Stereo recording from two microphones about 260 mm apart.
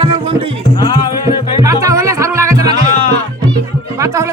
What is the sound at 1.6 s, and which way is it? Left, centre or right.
Music, centre.